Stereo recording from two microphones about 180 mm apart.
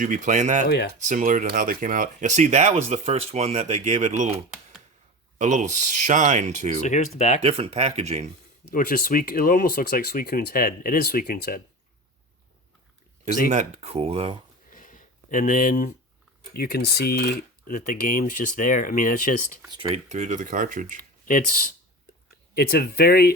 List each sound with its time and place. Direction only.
0.0 s speech: 45° right (ahead or behind)
5.4 s speech: 40° right (ahead or behind)
6.8 s speech: 40° left (ahead or behind)
7.4 s speech: 35° right (ahead or behind)
8.7 s speech: 55° left (ahead or behind)
13.5 s speech: 40° right (ahead or behind)
14.7 s a sound: 45° left (ahead or behind)
16.6 s speech: 60° left (ahead or behind)
19.6 s speech: 25° right (ahead or behind)
20.1 s speech: 40° right (ahead or behind)
22.5 s speech: 60° left (ahead or behind)